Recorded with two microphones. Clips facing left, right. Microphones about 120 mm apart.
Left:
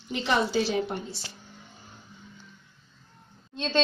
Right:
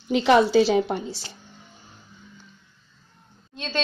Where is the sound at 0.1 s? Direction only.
90° right.